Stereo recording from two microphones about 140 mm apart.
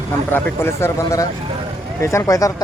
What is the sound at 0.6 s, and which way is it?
Speech, 20° left (ahead or behind).